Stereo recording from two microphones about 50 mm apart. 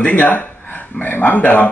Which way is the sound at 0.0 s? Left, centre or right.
Left.